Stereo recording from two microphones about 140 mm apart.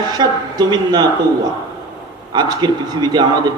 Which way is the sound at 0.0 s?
30° right (ahead or behind).